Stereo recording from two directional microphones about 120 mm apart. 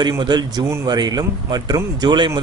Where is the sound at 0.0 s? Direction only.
35° right (ahead or behind).